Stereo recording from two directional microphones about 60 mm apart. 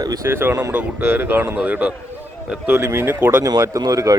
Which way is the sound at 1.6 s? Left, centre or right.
Right.